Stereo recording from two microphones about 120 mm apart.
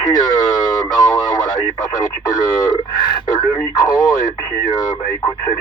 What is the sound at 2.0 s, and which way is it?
Speech, 30° left (ahead or behind).